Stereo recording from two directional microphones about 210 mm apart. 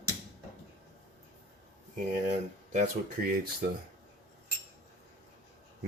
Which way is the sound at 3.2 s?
45° right (ahead or behind).